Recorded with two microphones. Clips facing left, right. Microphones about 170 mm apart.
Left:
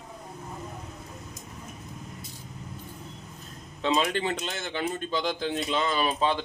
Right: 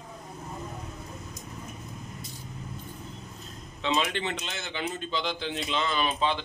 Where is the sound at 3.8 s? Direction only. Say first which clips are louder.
Left 3 dB; 40° left (ahead or behind).